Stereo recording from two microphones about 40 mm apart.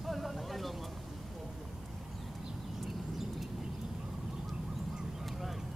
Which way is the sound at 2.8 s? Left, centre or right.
Centre.